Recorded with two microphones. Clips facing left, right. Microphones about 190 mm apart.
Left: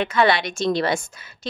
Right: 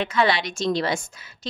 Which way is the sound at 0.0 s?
60° left (ahead or behind).